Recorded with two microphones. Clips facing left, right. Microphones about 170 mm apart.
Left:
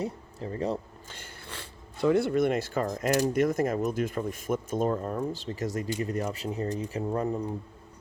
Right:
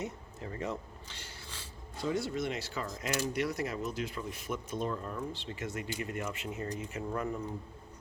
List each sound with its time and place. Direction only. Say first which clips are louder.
0.0 s speech: left 6 dB; 35° left (ahead or behind)
1.0 s speech: left 4 dB; 50° left (ahead or behind); by 7.5 s 35° left (ahead or behind)